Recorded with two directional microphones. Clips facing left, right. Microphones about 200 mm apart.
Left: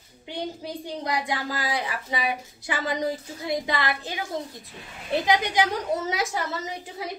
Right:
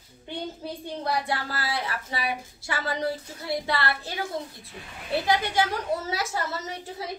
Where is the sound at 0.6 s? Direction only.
15° left (ahead or behind).